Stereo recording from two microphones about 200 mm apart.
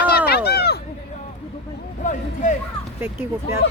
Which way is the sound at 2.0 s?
40° left (ahead or behind).